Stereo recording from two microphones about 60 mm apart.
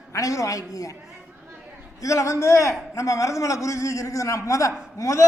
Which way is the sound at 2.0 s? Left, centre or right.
Left.